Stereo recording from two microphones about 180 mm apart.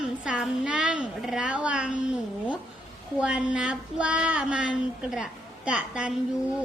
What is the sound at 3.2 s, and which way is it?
Child singing, 5° right (ahead or behind).